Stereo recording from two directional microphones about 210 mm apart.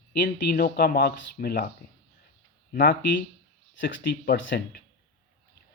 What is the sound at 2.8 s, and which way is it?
Speech, 45° left (ahead or behind).